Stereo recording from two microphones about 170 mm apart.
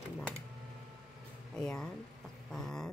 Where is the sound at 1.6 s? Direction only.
5° left (ahead or behind).